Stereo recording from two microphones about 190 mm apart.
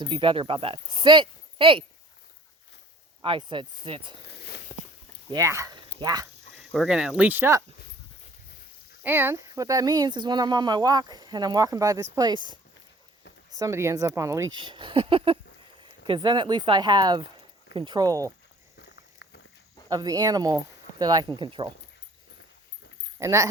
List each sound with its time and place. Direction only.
0.0 s speech: 25° right (ahead or behind)
3.2 s speech: 25° right (ahead or behind)
4.7 s walk: 25° left (ahead or behind)
5.3 s speech: 15° right (ahead or behind)
6.6 s speech: centre (ahead or behind)
9.0 s speech: 10° right (ahead or behind)
14.6 s speech: 25° right (ahead or behind)
18.8 s walk: 65° left (ahead or behind)
19.9 s speech: 20° right (ahead or behind)
23.2 s speech: 15° right (ahead or behind)